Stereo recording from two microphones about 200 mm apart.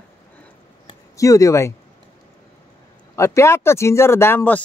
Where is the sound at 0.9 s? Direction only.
15° left (ahead or behind).